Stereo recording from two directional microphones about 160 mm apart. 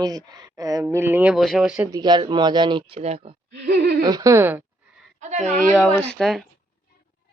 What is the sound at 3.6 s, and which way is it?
Laughter, 90° right.